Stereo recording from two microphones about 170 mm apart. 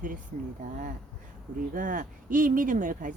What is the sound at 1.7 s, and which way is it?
Speech, 50° right (ahead or behind).